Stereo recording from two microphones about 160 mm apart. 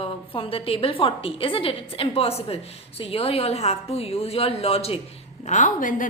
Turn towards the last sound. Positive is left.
turn(degrees=55)  # may be behind; listen again after turning